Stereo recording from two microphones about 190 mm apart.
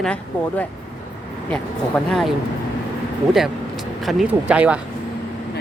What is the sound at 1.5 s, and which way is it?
Speech, 5° left (ahead or behind).